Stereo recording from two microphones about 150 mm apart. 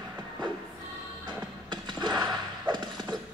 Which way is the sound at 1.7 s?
30° right (ahead or behind).